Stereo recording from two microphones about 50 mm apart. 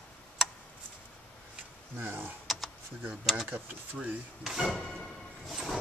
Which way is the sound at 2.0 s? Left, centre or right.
Right.